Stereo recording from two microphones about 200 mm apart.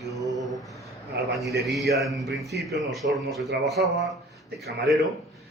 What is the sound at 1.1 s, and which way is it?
Speech, 55° right (ahead or behind).